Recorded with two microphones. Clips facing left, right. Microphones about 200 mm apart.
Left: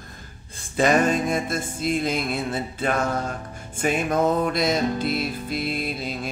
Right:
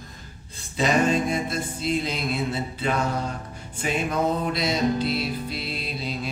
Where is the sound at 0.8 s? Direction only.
50° left (ahead or behind).